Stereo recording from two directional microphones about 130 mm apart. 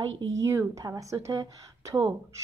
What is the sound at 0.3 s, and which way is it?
A woman's voice, 20° right (ahead or behind).